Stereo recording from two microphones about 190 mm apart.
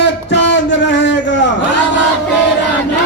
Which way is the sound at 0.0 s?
70° left (ahead or behind).